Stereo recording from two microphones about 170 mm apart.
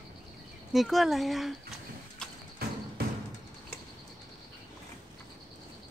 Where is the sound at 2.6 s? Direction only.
65° right (ahead or behind).